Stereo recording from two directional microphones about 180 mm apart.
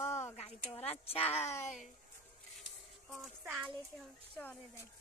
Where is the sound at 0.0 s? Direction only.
40° left (ahead or behind).